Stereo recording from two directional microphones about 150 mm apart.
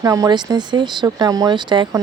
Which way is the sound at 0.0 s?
20° right (ahead or behind).